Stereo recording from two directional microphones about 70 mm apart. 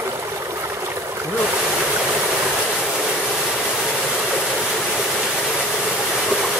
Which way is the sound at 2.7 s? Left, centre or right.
Centre.